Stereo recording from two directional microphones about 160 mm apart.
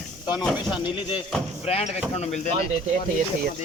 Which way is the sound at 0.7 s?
30° left (ahead or behind).